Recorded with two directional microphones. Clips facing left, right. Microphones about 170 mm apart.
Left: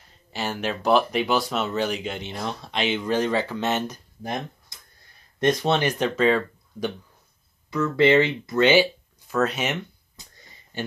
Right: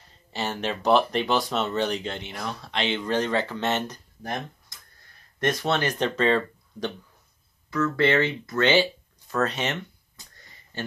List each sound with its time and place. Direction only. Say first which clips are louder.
0.3 s speech: left 1 dB; 5° left (ahead or behind)
2.2 s speech: left 3 dB; 20° left (ahead or behind)